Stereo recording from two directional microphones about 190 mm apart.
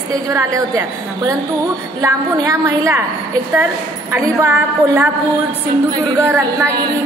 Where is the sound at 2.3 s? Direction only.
15° right (ahead or behind).